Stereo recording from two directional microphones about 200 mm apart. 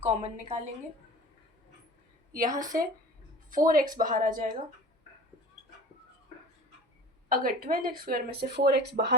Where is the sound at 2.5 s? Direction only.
20° right (ahead or behind).